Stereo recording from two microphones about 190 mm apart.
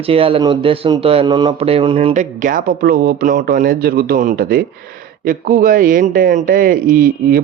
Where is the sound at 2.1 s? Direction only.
45° right (ahead or behind).